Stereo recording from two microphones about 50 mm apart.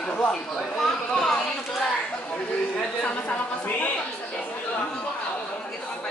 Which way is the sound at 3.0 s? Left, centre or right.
Left.